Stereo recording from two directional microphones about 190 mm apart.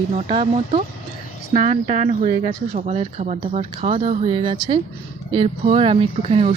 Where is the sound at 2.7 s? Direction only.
35° right (ahead or behind).